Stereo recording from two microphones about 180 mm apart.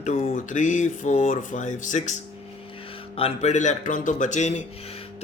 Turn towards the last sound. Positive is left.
turn(degrees=40)  # may be behind; listen again after turning